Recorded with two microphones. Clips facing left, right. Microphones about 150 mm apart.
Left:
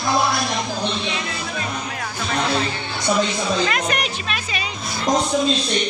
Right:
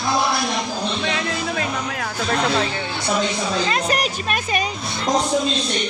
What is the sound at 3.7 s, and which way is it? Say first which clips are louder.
Speech: right 2 dB; 35° right (ahead or behind).